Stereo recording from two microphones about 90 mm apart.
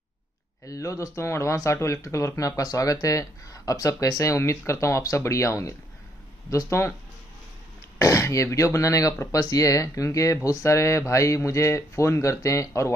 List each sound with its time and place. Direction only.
0.7 s speech: 35° left (ahead or behind)
8.0 s speech: 35° left (ahead or behind)